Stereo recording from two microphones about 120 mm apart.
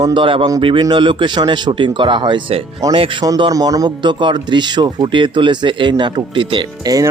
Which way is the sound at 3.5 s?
30° right (ahead or behind).